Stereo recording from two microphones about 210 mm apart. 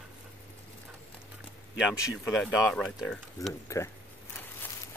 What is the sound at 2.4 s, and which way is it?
Speech, 5° left (ahead or behind).